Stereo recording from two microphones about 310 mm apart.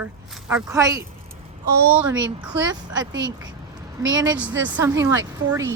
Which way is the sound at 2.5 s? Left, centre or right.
Right.